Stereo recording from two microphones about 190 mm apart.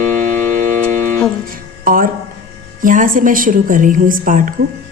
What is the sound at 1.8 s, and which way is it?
Music, 50° right (ahead or behind).